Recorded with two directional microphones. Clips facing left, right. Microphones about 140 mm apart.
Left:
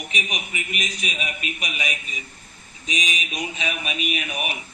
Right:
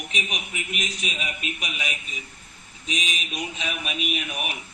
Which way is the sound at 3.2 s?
10° left (ahead or behind).